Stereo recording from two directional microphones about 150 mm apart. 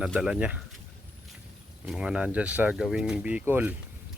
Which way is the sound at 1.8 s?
5° right (ahead or behind).